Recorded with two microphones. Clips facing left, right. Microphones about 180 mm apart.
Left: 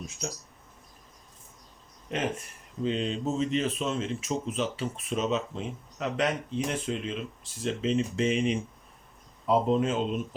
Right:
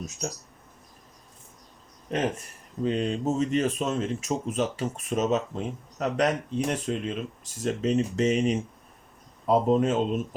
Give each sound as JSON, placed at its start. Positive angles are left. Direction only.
{"t": 0.0, "sound": "speech", "side_deg": -45}
{"t": 2.8, "sound": "a man's voice", "side_deg": -45}